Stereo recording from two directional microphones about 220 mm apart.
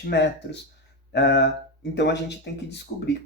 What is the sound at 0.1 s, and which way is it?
Speech, 50° left (ahead or behind).